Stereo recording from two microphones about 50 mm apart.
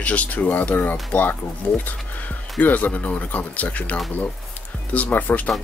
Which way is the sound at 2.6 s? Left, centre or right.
Left.